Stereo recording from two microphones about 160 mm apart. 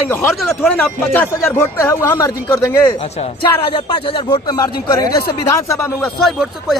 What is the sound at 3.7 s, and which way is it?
Speech, 35° left (ahead or behind).